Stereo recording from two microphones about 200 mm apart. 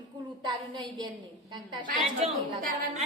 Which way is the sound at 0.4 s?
20° right (ahead or behind).